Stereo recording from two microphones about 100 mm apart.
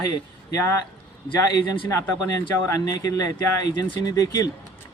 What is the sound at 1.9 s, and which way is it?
Speech, 30° left (ahead or behind).